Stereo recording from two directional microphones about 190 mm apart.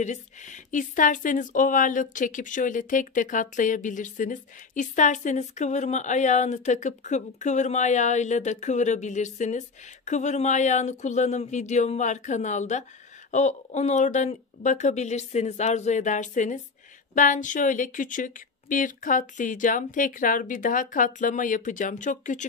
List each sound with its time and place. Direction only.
0.0 s speech: 40° left (ahead or behind)